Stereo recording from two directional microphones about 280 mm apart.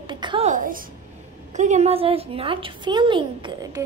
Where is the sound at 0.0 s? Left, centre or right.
Centre.